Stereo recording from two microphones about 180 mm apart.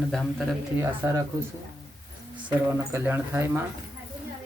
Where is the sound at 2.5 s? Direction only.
15° right (ahead or behind).